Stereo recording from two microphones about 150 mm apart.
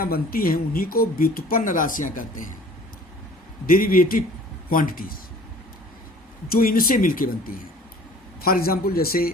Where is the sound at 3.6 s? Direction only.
70° left (ahead or behind).